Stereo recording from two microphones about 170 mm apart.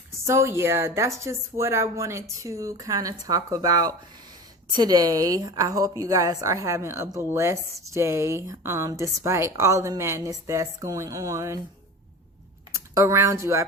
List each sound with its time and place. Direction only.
0.3 s a woman's voice: 15° right (ahead or behind)
12.7 s speech: 15° right (ahead or behind)